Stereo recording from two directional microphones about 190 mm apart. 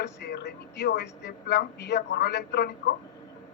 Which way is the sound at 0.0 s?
60° left (ahead or behind).